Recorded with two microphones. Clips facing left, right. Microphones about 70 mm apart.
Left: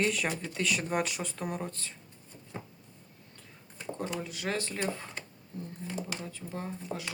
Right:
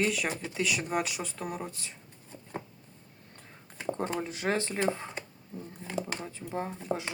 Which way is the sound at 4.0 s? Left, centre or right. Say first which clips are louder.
Right 2 dB; right.